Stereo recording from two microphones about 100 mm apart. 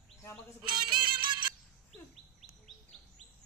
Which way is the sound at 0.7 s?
50° right (ahead or behind).